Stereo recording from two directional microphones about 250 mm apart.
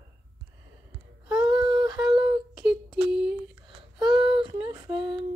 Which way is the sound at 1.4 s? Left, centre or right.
Centre.